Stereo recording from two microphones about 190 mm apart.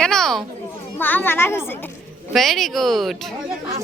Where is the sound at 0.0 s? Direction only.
5° left (ahead or behind).